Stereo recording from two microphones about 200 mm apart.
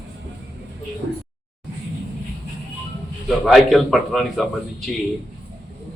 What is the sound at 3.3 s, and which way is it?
A man's voice, centre (ahead or behind).